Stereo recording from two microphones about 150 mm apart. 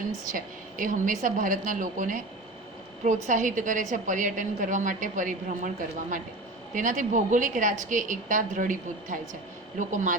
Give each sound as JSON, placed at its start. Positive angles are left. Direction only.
{"t": 0.3, "sound": "a woman's voice", "side_deg": -65}